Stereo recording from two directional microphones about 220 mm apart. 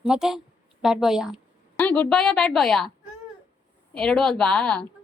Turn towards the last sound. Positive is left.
turn(degrees=5)  # may be behind; listen again after turning